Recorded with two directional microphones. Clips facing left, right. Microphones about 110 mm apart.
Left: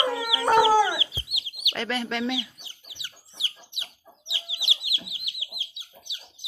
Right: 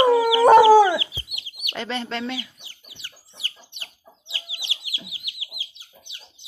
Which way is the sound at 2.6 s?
20° left (ahead or behind).